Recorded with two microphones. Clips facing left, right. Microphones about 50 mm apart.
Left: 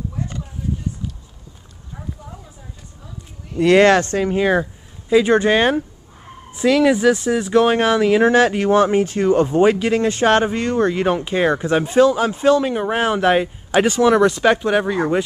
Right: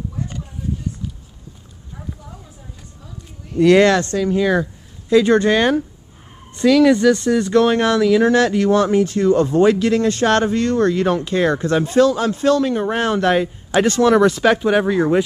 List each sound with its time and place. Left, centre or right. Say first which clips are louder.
3.4 s speech: right 1 dB; centre
3.9 s speech: left 1 dB; left
5.1 s speech: right 1 dB; centre